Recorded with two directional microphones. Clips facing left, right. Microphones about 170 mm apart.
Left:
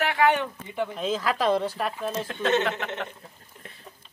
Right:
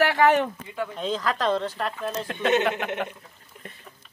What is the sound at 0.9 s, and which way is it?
Speech, 5° left (ahead or behind).